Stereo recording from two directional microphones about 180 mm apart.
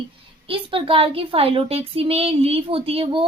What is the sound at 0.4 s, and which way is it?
A woman's voice, 30° right (ahead or behind).